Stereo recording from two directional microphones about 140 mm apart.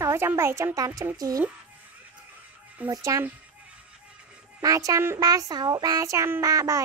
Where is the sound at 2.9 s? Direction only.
20° right (ahead or behind).